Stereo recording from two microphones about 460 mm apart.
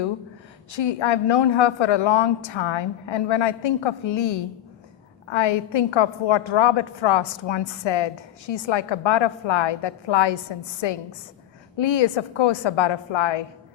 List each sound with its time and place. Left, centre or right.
0.7 s a woman's voice: left
11.8 s a woman's voice: left